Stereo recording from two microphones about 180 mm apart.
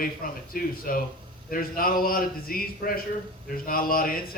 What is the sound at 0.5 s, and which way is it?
A man's voice, 50° left (ahead or behind).